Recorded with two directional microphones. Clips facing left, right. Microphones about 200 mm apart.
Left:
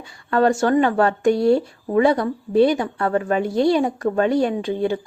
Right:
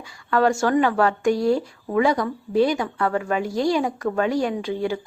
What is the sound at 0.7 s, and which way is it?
A woman's voice, 30° left (ahead or behind).